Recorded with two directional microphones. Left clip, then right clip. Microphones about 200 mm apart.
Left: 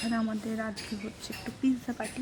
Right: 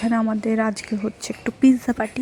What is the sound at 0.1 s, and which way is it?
Speech, 25° right (ahead or behind).